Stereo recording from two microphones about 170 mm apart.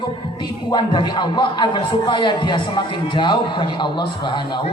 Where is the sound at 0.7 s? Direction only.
25° left (ahead or behind).